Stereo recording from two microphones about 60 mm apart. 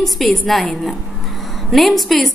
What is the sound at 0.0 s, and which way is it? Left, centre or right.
Speech, centre.